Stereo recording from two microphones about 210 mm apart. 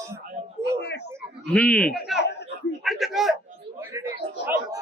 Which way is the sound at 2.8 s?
Centre (ahead or behind).